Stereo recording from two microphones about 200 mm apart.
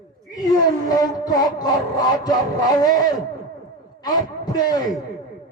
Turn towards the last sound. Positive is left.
turn(degrees=20)  # may be behind; listen again after turning